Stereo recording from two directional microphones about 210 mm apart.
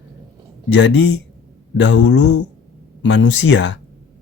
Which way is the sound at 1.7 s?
55° left (ahead or behind).